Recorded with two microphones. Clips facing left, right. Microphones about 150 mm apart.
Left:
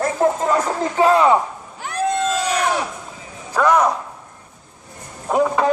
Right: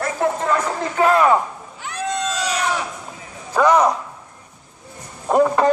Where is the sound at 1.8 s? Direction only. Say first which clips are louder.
Left 4 dB; 50° left (ahead or behind).